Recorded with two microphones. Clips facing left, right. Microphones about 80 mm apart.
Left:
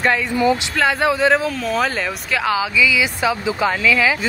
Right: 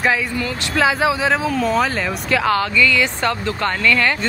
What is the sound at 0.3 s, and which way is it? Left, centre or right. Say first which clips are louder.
Speech: left 7 dB; centre.